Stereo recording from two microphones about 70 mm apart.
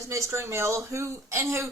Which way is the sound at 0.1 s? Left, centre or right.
Right.